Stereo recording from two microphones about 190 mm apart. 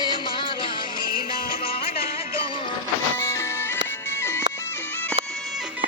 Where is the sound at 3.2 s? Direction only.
15° left (ahead or behind).